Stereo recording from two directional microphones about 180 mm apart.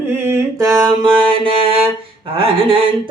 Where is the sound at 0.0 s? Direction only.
15° right (ahead or behind); by 1.7 s 30° right (ahead or behind).